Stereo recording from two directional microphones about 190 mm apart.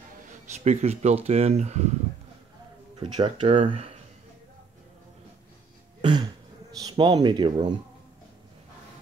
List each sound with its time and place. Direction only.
0.7 s speech: 35° right (ahead or behind)
3.0 s speech: 25° right (ahead or behind)
5.9 s throat clearing: 25° right (ahead or behind)
6.8 s speech: 20° right (ahead or behind)